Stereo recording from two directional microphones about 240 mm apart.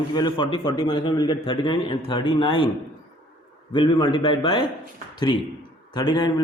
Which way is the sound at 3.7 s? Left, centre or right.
Centre.